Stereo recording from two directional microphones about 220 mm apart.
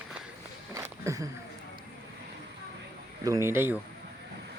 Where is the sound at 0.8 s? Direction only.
15° right (ahead or behind).